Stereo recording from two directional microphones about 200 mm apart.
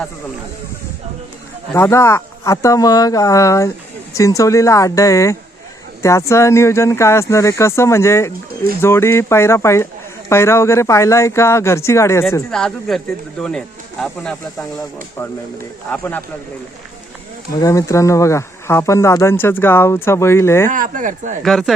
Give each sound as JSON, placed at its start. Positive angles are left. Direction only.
{"t": 1.7, "sound": "speech", "side_deg": 10}
{"t": 12.3, "sound": "speech", "side_deg": 5}
{"t": 15.9, "sound": "speech", "side_deg": 10}
{"t": 17.6, "sound": "speech", "side_deg": 15}
{"t": 20.7, "sound": "speech", "side_deg": -40}
{"t": 21.4, "sound": "speech", "side_deg": 0}